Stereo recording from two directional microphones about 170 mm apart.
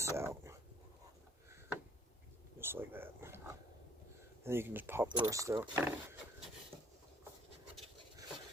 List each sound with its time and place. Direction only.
0.0 s speech: 15° right (ahead or behind)
2.6 s a sound: 15° right (ahead or behind)
4.4 s speech: 15° right (ahead or behind)
6.7 s rub: 15° right (ahead or behind)